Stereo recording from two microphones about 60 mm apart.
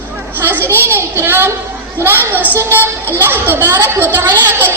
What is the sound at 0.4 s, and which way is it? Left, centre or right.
Children playing, right.